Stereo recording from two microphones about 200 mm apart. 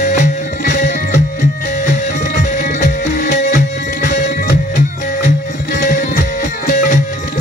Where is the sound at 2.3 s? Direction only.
45° left (ahead or behind).